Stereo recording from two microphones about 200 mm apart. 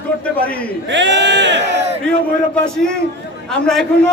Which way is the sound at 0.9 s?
65° right (ahead or behind).